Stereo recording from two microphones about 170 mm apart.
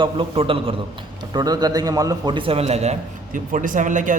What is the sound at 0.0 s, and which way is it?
A man's voice, 30° right (ahead or behind).